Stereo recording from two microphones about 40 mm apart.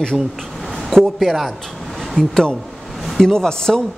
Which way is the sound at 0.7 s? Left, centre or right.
Centre.